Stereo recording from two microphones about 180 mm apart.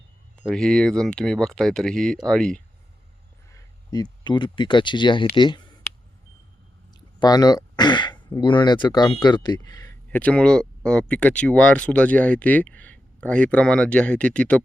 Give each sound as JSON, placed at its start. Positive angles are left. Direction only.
{"t": 0.3, "sound": "speech", "side_deg": 5}
{"t": 3.5, "sound": "speech", "side_deg": 20}
{"t": 6.9, "sound": "speech", "side_deg": 25}
{"t": 10.1, "sound": "speech", "side_deg": 10}